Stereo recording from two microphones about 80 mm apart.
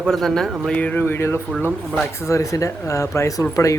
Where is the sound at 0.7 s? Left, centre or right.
Centre.